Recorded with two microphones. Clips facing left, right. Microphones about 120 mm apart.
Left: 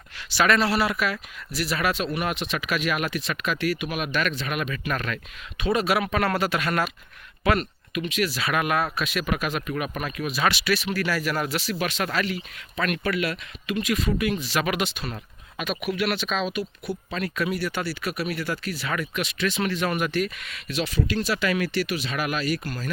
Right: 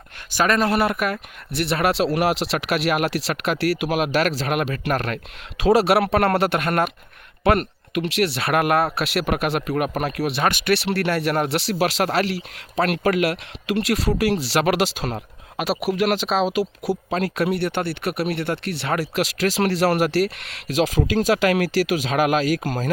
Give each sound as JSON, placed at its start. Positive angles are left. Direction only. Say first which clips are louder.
{"t": 0.3, "sound": "speech", "louder": "right 2 dB", "side_deg": -45}
{"t": 1.5, "sound": "speech", "louder": "right 5 dB", "side_deg": -65}
{"t": 10.4, "sound": "speech", "louder": "right 3 dB", "side_deg": -50}
{"t": 10.8, "sound": "speech", "louder": "right 4 dB", "side_deg": -70}
{"t": 11.5, "sound": "speech", "louder": "right 6 dB", "side_deg": -70}